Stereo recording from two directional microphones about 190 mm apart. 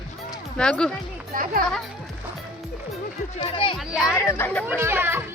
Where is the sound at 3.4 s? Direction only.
25° left (ahead or behind).